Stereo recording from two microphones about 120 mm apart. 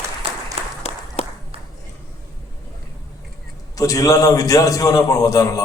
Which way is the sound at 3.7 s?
30° left (ahead or behind).